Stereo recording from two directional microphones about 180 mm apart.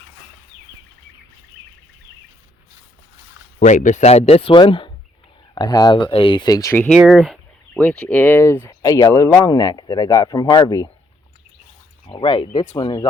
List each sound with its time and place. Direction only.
3.6 s speech: 45° left (ahead or behind); by 6.9 s 15° left (ahead or behind)
6.9 s speech: centre (ahead or behind); by 10.8 s 20° left (ahead or behind)
12.0 s speech: 30° left (ahead or behind)